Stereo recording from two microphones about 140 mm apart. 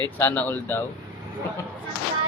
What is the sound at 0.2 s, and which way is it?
Speech, 15° left (ahead or behind).